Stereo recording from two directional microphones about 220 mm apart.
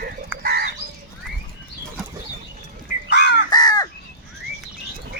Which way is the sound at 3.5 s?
15° left (ahead or behind).